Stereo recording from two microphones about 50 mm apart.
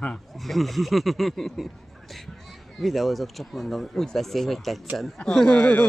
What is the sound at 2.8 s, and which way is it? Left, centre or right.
Speech, centre.